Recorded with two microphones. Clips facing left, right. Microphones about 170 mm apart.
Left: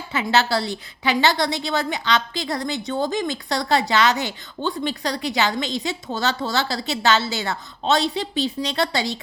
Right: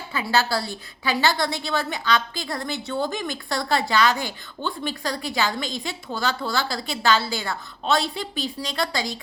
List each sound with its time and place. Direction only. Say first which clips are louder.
0.1 s a woman's voice: left 3 dB; 20° left (ahead or behind)